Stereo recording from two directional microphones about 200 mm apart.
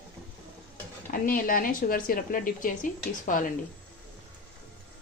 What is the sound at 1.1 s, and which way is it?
Speech, 45° left (ahead or behind).